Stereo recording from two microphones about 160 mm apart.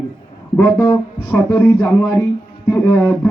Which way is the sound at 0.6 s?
15° left (ahead or behind).